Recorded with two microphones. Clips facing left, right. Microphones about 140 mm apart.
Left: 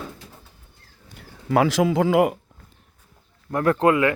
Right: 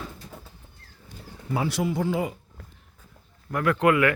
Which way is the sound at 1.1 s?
80° left.